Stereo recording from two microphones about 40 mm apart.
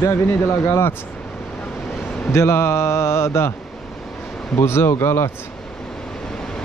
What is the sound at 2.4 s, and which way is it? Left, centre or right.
Speech, left.